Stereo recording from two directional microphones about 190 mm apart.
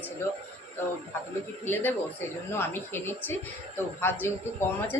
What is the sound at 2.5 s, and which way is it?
A woman's voice, 10° left (ahead or behind).